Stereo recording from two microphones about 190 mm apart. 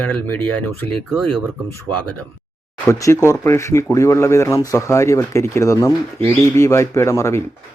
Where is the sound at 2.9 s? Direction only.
15° left (ahead or behind).